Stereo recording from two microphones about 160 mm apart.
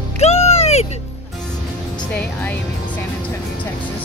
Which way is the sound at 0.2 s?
40° left (ahead or behind).